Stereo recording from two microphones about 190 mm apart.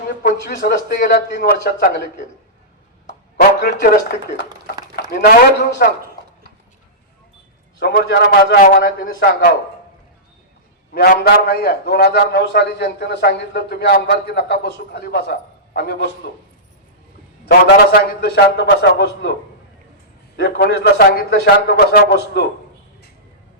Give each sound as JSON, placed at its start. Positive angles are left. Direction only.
{"t": 0.2, "sound": "a man's voice", "side_deg": 50}
{"t": 3.7, "sound": "speech", "side_deg": 50}
{"t": 5.2, "sound": "a man's voice", "side_deg": 60}
{"t": 7.8, "sound": "a man's voice", "side_deg": 60}
{"t": 10.9, "sound": "a man's voice", "side_deg": 55}
{"t": 17.4, "sound": "a man's voice", "side_deg": 55}